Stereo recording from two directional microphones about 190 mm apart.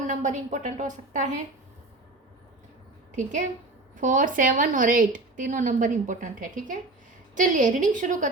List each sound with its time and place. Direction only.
0.1 s a woman's voice: 40° right (ahead or behind)
3.9 s a woman's voice: 45° right (ahead or behind)